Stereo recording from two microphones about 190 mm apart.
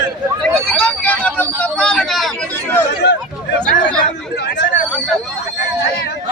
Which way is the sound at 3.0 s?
60° left (ahead or behind).